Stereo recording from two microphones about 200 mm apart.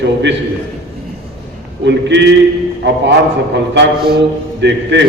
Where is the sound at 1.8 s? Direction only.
60° right (ahead or behind).